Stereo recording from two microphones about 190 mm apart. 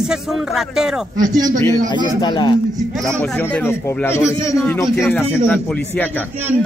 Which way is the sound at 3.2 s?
10° left (ahead or behind).